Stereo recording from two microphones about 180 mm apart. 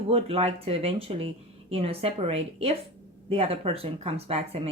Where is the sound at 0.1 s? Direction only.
35° right (ahead or behind).